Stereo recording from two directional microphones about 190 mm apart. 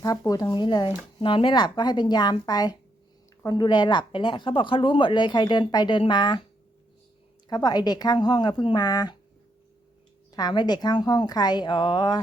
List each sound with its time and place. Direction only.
0.0 s a woman's voice: 20° left (ahead or behind)
7.5 s a woman's voice: 20° left (ahead or behind)
10.3 s a woman's voice: 20° left (ahead or behind)